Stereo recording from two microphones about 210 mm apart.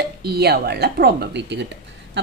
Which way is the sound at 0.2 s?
50° right (ahead or behind).